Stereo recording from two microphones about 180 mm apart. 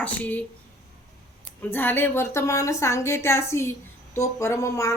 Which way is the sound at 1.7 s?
10° left (ahead or behind).